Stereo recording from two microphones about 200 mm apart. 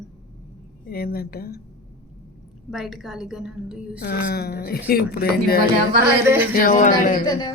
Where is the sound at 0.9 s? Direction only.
50° left (ahead or behind).